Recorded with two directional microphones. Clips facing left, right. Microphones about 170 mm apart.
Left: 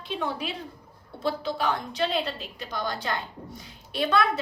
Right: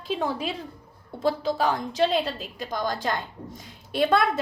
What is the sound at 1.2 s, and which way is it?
A woman's voice, 40° right (ahead or behind).